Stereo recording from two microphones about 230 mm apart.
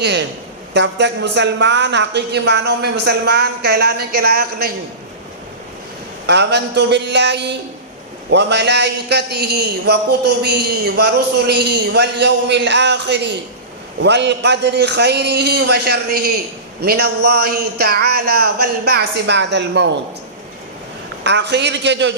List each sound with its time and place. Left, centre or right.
0.0 s a man's voice: right
6.2 s a man's voice: right
21.2 s a man's voice: right